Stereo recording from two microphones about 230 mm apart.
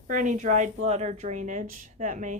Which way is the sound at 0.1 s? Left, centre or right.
Right.